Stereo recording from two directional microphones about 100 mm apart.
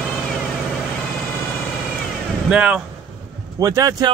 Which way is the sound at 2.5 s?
10° right (ahead or behind).